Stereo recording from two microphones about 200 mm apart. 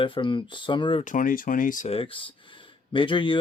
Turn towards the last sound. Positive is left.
turn(degrees=25)  # may be behind; listen again after turning